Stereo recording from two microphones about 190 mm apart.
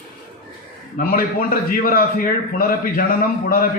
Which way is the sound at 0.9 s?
50° left (ahead or behind).